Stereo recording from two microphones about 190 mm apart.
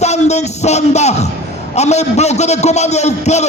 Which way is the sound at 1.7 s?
35° left (ahead or behind).